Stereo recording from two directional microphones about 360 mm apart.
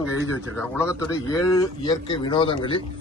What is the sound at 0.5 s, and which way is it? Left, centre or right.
A man's voice, centre.